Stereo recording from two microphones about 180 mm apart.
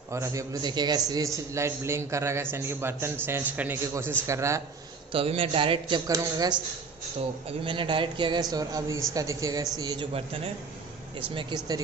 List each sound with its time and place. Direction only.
0.1 s a man's voice: 15° right (ahead or behind)
5.1 s a woman's voice: 30° right (ahead or behind)
7.6 s a woman's voice: 25° right (ahead or behind)